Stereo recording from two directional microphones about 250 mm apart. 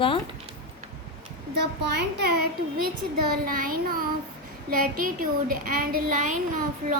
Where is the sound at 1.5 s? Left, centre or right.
Right.